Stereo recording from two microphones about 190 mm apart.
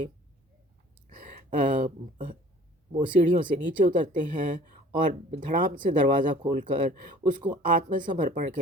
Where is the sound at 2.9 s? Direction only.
25° right (ahead or behind).